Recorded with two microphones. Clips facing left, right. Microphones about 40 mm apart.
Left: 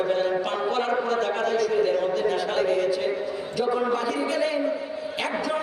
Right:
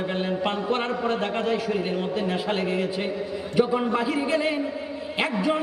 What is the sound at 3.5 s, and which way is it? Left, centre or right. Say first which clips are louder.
A man's voice: right 2 dB; right.